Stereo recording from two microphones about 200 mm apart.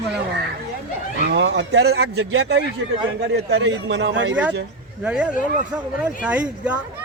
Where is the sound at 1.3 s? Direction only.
60° right (ahead or behind).